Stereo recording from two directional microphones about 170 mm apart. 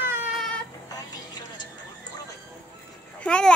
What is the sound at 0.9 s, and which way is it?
Music, 25° left (ahead or behind).